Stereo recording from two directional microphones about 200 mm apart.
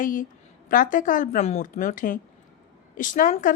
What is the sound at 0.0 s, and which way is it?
A woman's voice, 45° left (ahead or behind).